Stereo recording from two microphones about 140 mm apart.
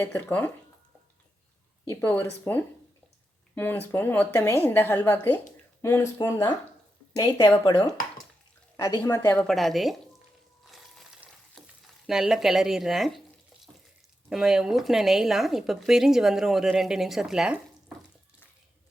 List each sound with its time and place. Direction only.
0.0 s a woman's voice: 15° left (ahead or behind)
2.0 s a woman's voice: 10° left (ahead or behind)
7.6 s speech: 35° left (ahead or behind)
9.0 s speech: 20° left (ahead or behind)
9.4 s speech: centre (ahead or behind)
10.7 s stir: centre (ahead or behind)
14.3 s speech: 5° right (ahead or behind)